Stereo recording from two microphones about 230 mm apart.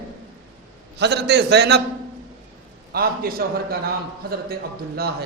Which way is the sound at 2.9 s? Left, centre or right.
Right.